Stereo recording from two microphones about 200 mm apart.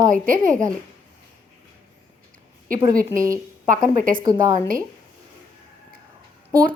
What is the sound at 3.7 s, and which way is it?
Speech, 40° right (ahead or behind).